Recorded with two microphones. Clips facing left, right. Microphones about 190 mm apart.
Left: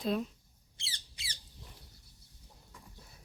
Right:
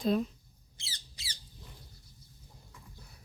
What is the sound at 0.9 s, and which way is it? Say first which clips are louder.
Rodents: right 1 dB; 35° right (ahead or behind).